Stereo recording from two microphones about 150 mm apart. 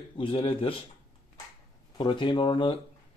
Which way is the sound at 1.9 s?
35° left (ahead or behind).